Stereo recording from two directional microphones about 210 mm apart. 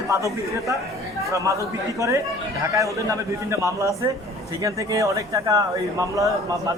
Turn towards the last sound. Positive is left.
turn(degrees=-15)  # may be behind; listen again after turning